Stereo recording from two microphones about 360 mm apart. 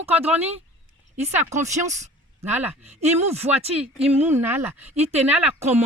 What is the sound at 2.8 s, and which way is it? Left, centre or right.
Speech, centre.